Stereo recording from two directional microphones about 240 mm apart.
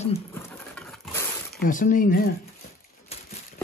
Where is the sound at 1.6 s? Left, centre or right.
Left.